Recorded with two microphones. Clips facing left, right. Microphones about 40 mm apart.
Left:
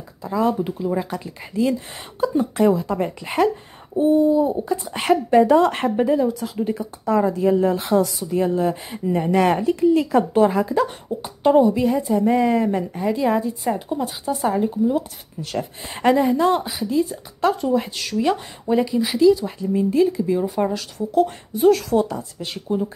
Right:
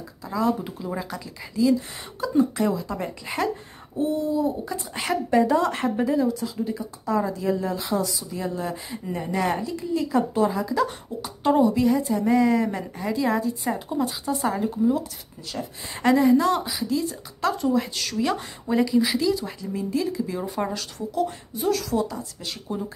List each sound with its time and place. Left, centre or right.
0.2 s a woman's voice: left
1.2 s speech: left
4.0 s a woman's voice: left
4.8 s speech: left
5.9 s a woman's voice: left
6.4 s speech: left
8.1 s speech: left
10.7 s a woman's voice: left
13.7 s speech: centre
15.4 s speech: left
16.0 s a woman's voice: left; by 19.5 s centre
19.6 s a woman's voice: left
20.3 s speech: centre
21.5 s speech: left